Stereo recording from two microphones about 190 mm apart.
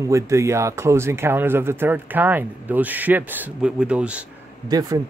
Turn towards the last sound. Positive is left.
turn(degrees=-20)  # may be behind; listen again after turning